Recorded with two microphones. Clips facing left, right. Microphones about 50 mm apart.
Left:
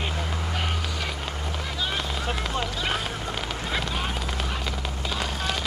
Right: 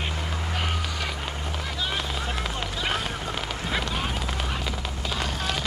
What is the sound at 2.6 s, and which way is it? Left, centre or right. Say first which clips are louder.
Run: even; centre.